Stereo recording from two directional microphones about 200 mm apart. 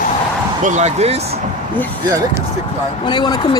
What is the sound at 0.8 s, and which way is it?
Speech, 35° right (ahead or behind).